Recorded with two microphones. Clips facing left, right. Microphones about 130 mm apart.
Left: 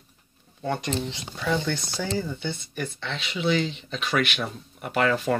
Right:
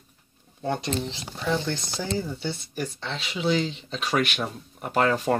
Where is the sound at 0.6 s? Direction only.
35° right (ahead or behind).